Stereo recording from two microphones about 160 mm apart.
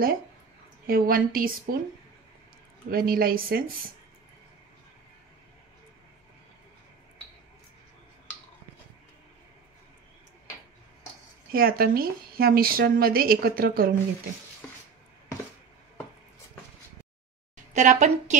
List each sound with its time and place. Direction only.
0.8 s a woman's voice: 65° right (ahead or behind)
2.9 s a woman's voice: 70° right (ahead or behind)
11.5 s a woman's voice: 70° right (ahead or behind)
17.7 s speech: 50° right (ahead or behind)